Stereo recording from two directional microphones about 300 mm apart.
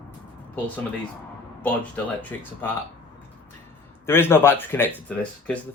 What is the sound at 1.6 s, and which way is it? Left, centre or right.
Speech, centre.